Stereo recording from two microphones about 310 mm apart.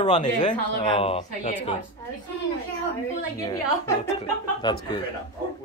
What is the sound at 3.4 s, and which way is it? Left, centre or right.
A woman's voice, centre.